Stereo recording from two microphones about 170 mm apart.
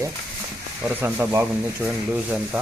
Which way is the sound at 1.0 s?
15° right (ahead or behind).